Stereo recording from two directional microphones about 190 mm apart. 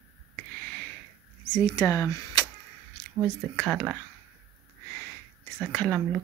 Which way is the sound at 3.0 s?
5° left (ahead or behind).